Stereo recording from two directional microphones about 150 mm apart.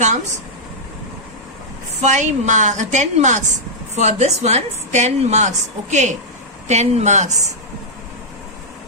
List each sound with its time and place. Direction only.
2.0 s a woman's voice: 55° right (ahead or behind)